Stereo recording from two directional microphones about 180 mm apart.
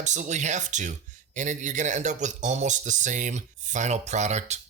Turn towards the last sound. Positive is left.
turn(degrees=-40)  # may be behind; listen again after turning